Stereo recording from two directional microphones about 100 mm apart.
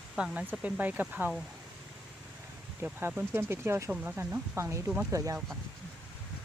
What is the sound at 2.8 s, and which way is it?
Speech, 15° right (ahead or behind).